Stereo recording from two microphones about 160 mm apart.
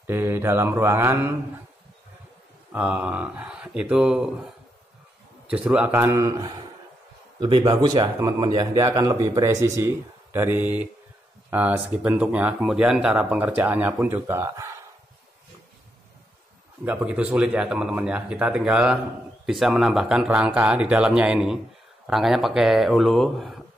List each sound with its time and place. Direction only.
0.0 s speech: 15° right (ahead or behind)
2.7 s speech: 10° right (ahead or behind)
5.5 s speech: 10° right (ahead or behind)
7.3 s speech: 30° right (ahead or behind)
16.8 s speech: 10° right (ahead or behind)